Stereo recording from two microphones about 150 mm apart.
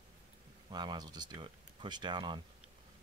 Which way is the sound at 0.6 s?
30° right (ahead or behind).